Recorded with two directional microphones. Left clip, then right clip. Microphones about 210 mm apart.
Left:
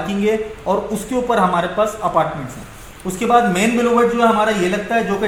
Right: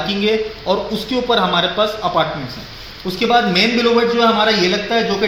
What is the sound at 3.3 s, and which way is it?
Speech, 20° left (ahead or behind).